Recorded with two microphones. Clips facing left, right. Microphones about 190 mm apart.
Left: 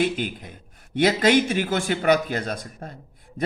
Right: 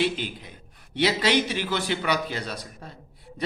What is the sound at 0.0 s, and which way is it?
A man's voice, 50° left (ahead or behind).